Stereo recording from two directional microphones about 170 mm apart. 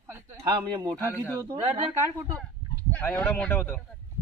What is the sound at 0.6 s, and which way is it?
Speech, 25° right (ahead or behind).